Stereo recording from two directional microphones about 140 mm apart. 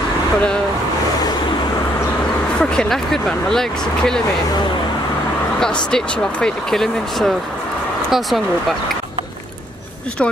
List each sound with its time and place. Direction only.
2.6 s speech: 5° left (ahead or behind)
5.6 s speech: 5° left (ahead or behind)